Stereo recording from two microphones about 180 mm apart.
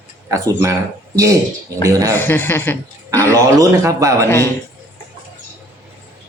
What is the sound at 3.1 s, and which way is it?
A man's voice, 15° right (ahead or behind).